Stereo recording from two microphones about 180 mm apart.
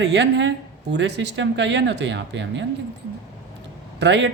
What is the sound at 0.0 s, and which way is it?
Speech, 80° right.